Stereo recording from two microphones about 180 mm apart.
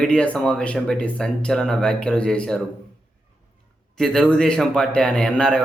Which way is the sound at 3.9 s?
5° left (ahead or behind).